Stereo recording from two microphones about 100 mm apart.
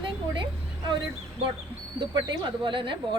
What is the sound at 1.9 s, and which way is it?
A woman's voice, 55° right (ahead or behind).